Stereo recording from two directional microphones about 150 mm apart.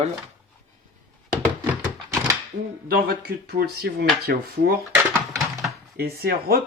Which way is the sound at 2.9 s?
85° right.